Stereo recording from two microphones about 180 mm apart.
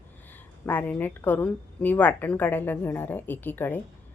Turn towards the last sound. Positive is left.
turn(degrees=10)  # may be behind; listen again after turning